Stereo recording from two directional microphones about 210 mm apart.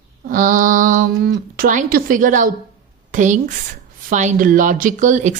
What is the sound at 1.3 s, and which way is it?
Speech, 40° right (ahead or behind).